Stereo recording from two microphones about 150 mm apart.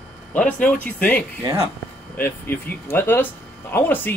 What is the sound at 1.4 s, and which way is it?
Speech, 25° right (ahead or behind).